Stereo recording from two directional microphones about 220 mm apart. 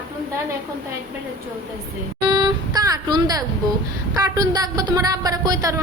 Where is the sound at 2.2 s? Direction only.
20° right (ahead or behind).